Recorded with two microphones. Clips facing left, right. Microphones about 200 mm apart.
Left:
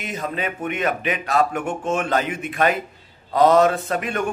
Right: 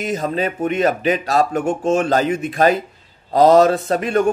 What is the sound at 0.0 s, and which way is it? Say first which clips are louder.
Speech: right 6 dB; 40° right (ahead or behind).